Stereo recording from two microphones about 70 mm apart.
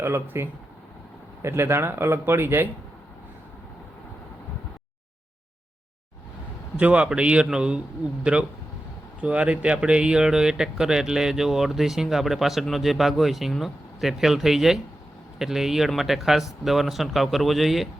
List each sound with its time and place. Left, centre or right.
0.0 s speech: right
6.7 s a man's voice: centre